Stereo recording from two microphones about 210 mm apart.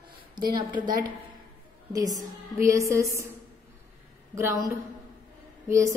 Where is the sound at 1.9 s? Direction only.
15° right (ahead or behind).